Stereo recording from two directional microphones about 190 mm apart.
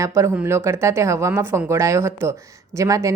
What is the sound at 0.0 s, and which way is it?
Speech, 15° right (ahead or behind).